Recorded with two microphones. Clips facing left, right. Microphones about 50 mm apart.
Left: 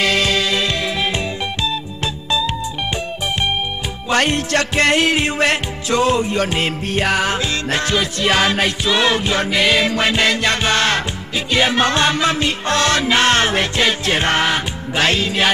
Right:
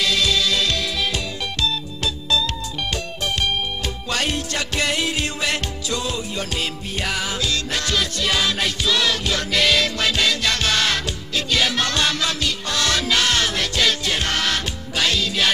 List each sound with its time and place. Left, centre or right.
0.0 s music: left
4.5 s music: left
7.3 s music: left
8.3 s music: left